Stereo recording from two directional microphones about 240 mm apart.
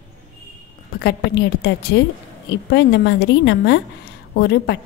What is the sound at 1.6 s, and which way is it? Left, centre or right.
A woman's voice, left.